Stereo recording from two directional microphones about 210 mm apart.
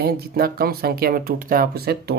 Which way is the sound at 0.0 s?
45° right (ahead or behind).